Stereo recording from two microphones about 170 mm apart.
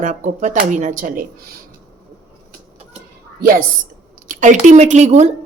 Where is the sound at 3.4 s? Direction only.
55° right (ahead or behind).